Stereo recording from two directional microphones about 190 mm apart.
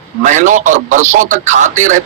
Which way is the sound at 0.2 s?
40° right (ahead or behind).